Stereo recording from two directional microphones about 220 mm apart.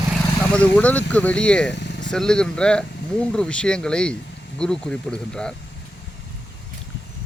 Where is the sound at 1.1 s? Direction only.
5° left (ahead or behind).